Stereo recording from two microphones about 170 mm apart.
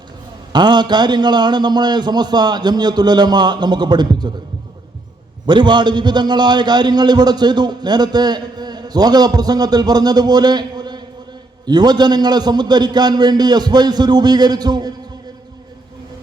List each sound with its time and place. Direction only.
0.5 s a man's voice: 25° right (ahead or behind)
5.5 s a man's voice: 25° right (ahead or behind)